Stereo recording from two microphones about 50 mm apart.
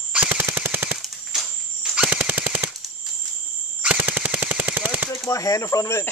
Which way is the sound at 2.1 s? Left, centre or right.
Right.